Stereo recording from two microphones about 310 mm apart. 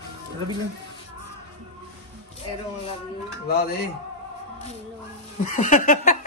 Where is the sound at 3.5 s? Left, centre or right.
Left.